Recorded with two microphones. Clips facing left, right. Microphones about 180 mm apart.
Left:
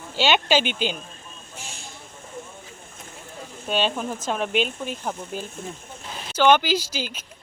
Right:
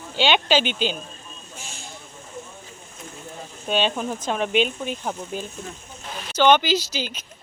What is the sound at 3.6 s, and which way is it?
Speech, 5° left (ahead or behind).